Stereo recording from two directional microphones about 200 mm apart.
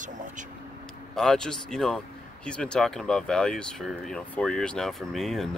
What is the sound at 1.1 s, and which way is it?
Speech, 5° left (ahead or behind).